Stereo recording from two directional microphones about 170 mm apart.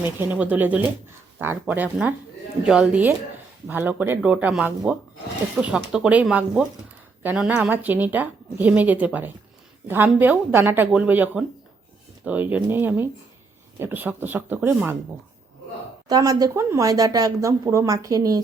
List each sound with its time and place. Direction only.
0.0 s a woman's voice: 10° right (ahead or behind)
16.0 s speech: 20° right (ahead or behind)